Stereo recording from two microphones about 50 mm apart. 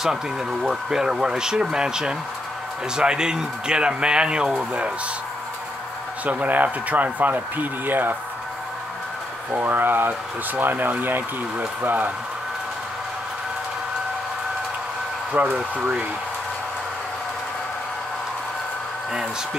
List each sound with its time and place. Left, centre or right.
0.0 s speech: centre
6.4 s speech: right
9.5 s speech: right
15.5 s speech: right